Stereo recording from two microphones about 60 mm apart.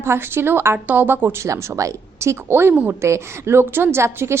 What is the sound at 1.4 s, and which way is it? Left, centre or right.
A woman's voice, right.